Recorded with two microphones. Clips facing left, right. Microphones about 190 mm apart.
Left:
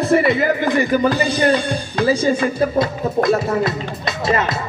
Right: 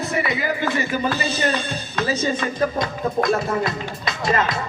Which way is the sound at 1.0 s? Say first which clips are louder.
Left 6 dB; 15° left (ahead or behind).